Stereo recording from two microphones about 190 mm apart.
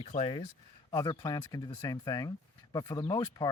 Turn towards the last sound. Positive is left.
turn(degrees=20)  # may be behind; listen again after turning